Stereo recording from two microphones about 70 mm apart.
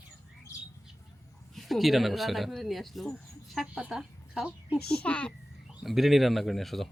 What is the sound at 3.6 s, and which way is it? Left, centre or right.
Speech, centre.